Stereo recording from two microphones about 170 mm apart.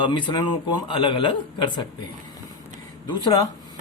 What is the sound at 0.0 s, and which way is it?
Speech, 25° left (ahead or behind).